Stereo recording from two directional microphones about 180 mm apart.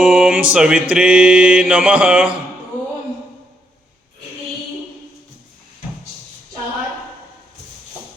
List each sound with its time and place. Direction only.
0.0 s mantra: 5° right (ahead or behind)